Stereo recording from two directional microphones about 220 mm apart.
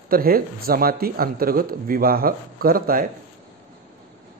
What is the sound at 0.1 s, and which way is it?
Speech, 40° right (ahead or behind).